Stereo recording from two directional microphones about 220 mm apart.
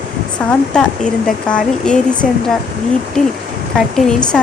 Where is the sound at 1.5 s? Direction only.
5° left (ahead or behind).